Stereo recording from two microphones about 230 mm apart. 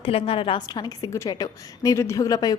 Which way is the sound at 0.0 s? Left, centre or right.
Left.